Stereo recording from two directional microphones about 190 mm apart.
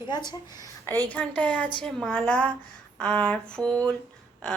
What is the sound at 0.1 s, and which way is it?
Speech, 20° left (ahead or behind).